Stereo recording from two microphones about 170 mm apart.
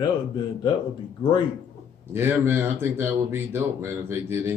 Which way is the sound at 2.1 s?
15° right (ahead or behind).